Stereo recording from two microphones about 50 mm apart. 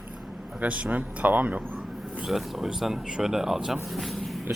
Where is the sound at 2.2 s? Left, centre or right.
Centre.